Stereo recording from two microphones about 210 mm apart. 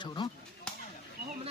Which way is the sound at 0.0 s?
20° left (ahead or behind).